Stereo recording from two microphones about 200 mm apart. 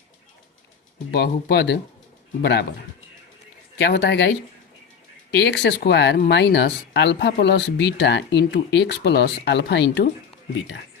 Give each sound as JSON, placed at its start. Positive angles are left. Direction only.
{"t": 1.1, "sound": "speech", "side_deg": 55}
{"t": 3.8, "sound": "speech", "side_deg": 60}
{"t": 5.4, "sound": "speech", "side_deg": 60}